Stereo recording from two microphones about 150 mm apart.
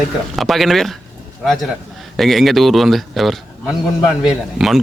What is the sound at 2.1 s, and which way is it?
Speech, centre (ahead or behind).